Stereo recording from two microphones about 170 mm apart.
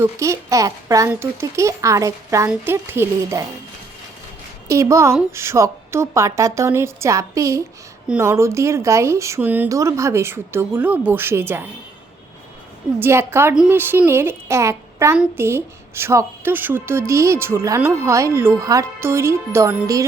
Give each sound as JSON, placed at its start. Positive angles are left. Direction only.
{"t": 0.0, "sound": "speech", "side_deg": -15}
{"t": 4.7, "sound": "speech", "side_deg": -15}
{"t": 13.0, "sound": "speech", "side_deg": -15}